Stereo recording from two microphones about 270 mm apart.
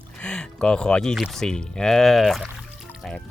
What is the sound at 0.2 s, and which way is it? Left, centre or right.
Speech, centre.